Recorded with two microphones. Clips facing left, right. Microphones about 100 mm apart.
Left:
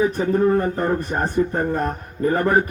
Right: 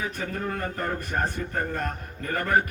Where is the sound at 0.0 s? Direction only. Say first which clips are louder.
Left 13 dB; 30° left (ahead or behind).